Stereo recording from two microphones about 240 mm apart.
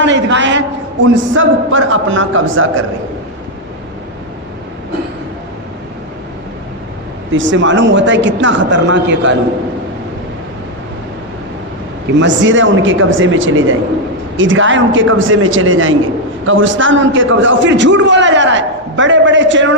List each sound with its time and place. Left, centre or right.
0.0 s a sound: right
1.0 s a man's voice: right
7.3 s a man's voice: right
12.1 s a man's voice: right